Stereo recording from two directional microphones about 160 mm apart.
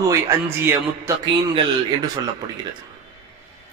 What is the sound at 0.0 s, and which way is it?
A man's voice, 15° right (ahead or behind).